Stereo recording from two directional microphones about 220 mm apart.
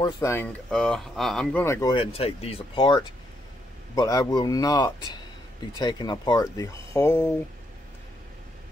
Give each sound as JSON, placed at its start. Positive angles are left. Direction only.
{"t": 0.0, "sound": "speech", "side_deg": 15}